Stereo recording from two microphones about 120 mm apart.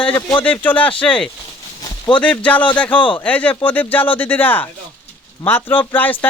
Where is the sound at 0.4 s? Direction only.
15° left (ahead or behind).